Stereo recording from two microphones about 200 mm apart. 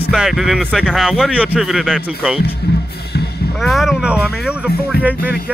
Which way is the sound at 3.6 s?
Centre (ahead or behind).